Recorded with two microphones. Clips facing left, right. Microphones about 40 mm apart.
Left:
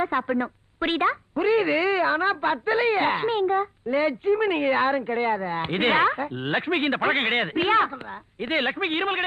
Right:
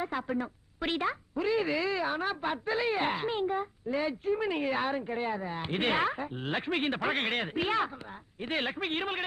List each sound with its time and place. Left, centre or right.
0.0 s speech: left